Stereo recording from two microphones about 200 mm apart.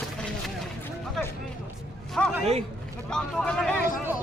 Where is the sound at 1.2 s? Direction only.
Centre (ahead or behind).